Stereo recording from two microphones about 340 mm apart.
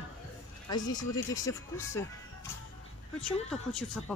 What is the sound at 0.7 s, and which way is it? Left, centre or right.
Speech, centre.